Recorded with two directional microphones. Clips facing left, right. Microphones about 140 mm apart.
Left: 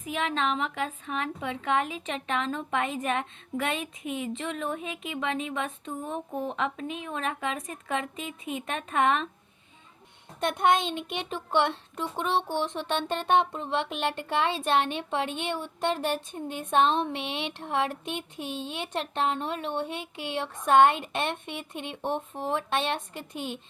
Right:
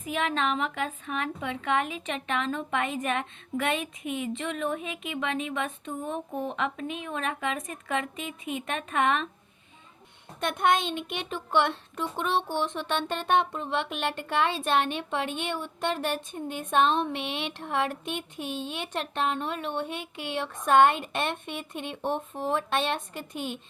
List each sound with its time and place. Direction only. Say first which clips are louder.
0.0 s a child's voice: right 1 dB; 25° left (ahead or behind)
10.4 s a child's voice: left 1 dB; 35° left (ahead or behind)